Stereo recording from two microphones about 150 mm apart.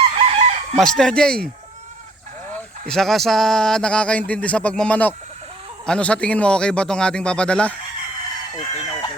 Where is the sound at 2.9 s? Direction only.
Centre (ahead or behind).